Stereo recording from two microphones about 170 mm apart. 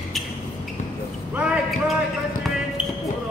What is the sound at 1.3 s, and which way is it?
Speech, 5° right (ahead or behind).